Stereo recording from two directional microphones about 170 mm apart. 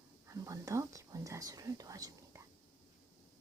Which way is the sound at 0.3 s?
20° right (ahead or behind).